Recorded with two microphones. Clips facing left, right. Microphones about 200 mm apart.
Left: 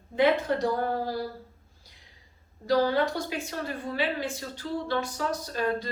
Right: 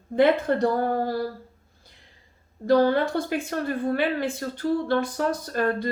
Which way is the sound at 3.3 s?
55° right (ahead or behind).